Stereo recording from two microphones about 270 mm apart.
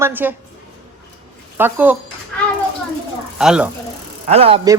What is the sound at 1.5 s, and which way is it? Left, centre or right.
Speech, centre.